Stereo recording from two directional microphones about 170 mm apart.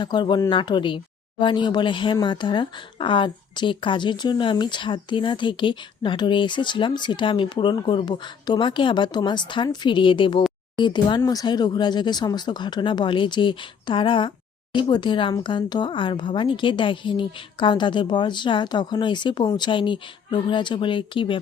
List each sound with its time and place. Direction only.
0.0 s speech: 25° left (ahead or behind)